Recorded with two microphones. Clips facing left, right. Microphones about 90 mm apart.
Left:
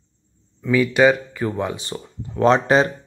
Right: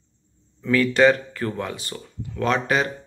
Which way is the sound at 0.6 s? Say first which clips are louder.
Left 1 dB; 10° left (ahead or behind).